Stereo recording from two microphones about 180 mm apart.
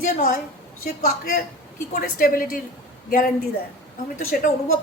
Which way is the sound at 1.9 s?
55° left (ahead or behind).